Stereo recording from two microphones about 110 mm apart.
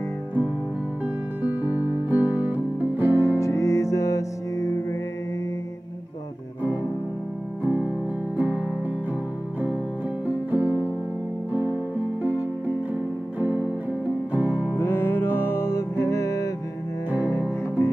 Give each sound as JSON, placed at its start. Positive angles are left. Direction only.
{"t": 1.4, "sound": "music", "side_deg": -15}
{"t": 3.3, "sound": "music", "side_deg": 30}
{"t": 7.6, "sound": "music", "side_deg": -15}
{"t": 10.2, "sound": "music", "side_deg": -15}
{"t": 14.8, "sound": "music", "side_deg": 20}